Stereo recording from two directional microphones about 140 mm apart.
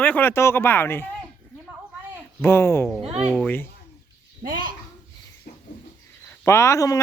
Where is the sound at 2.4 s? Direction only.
20° left (ahead or behind).